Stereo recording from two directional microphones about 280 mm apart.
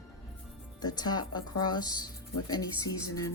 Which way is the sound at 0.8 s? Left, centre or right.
Centre.